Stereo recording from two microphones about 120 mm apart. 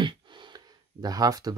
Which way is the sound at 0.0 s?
40° right (ahead or behind).